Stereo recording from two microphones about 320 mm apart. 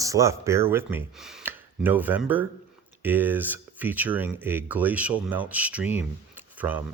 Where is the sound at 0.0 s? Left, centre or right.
Centre.